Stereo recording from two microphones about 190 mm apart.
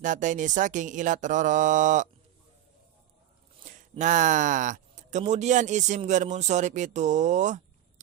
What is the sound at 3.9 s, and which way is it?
Speech, 40° right (ahead or behind).